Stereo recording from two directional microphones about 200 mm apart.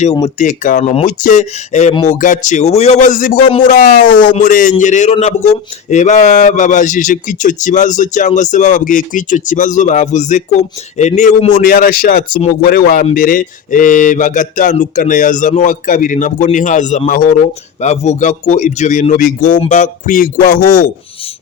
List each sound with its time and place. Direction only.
0.0 s speech: 35° left (ahead or behind)